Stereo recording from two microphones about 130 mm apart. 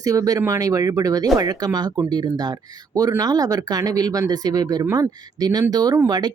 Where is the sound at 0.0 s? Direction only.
25° right (ahead or behind).